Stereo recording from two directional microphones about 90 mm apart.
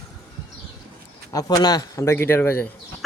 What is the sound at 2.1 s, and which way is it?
Speech, 25° left (ahead or behind).